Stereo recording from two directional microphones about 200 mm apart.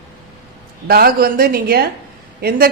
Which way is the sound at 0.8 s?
50° right (ahead or behind).